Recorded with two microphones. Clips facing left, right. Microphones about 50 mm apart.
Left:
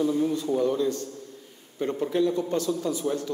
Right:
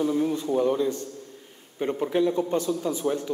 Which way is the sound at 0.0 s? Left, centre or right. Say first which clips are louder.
Even; right.